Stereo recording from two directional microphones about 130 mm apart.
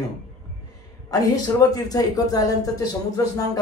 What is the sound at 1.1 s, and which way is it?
Speech, 30° left (ahead or behind).